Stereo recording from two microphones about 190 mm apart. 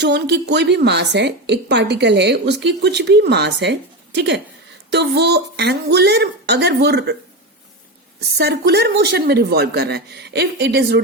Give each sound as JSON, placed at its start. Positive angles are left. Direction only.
{"t": 0.0, "sound": "a woman's voice", "side_deg": -65}
{"t": 8.4, "sound": "a woman's voice", "side_deg": -60}